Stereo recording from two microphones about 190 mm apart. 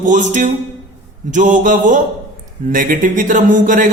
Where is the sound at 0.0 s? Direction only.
40° right (ahead or behind).